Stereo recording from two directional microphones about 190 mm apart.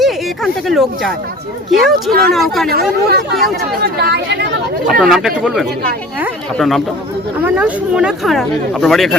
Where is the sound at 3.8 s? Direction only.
55° right (ahead or behind).